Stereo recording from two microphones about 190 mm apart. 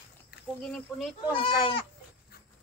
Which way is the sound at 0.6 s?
Centre (ahead or behind).